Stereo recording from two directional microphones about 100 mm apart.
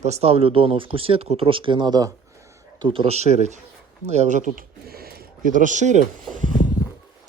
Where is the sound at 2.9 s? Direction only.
80° right.